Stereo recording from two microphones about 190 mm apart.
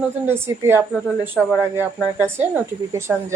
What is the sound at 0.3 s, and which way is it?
A woman's voice, 10° right (ahead or behind).